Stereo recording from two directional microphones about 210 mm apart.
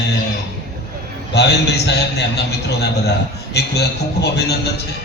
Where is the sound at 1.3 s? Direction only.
55° left (ahead or behind).